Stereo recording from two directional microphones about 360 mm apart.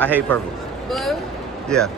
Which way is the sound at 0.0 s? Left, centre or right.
Centre.